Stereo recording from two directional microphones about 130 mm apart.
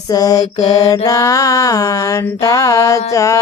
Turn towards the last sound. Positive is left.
turn(degrees=25)  # may be behind; listen again after turning